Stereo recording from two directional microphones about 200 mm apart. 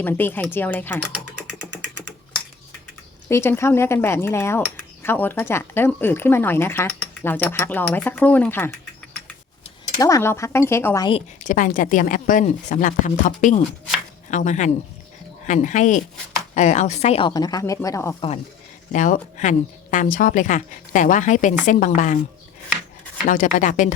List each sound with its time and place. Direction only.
0.0 s speech: 10° left (ahead or behind)
3.2 s speech: 10° left (ahead or behind)
10.0 s speech: 15° left (ahead or behind)
11.4 s a woman's voice: 40° left (ahead or behind); by 18.2 s 15° left (ahead or behind)
18.9 s speech: 40° left (ahead or behind)
23.2 s speech: 40° left (ahead or behind)